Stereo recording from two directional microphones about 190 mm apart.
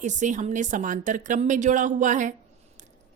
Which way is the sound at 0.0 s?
40° right (ahead or behind).